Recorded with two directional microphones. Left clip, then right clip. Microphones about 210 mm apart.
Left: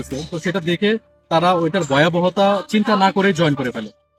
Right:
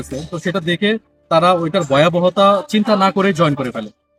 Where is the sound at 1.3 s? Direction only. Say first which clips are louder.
Right 3 dB; 15° right (ahead or behind).